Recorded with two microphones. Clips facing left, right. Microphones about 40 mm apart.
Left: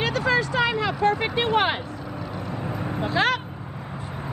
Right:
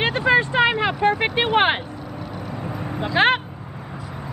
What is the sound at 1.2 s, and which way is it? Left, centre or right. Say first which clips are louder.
Speech: right 3 dB; right.